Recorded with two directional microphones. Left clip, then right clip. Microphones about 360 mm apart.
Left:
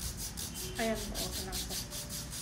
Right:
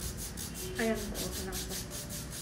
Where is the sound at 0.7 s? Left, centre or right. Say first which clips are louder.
Right 1 dB; left.